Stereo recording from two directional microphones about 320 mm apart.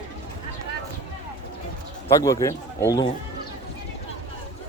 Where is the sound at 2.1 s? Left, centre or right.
Centre.